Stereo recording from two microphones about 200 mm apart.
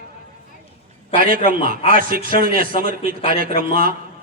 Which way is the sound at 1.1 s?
45° right (ahead or behind).